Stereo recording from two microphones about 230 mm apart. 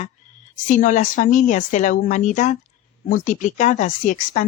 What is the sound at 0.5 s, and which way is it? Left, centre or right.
A woman's voice, left.